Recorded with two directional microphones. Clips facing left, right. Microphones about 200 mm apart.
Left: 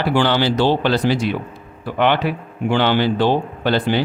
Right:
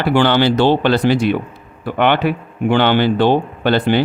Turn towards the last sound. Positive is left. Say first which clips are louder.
# right 3 dB
turn(degrees=-60)  # may be behind; listen again after turning